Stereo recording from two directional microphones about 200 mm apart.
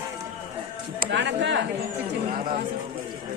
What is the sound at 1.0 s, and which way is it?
Speech, 60° right (ahead or behind).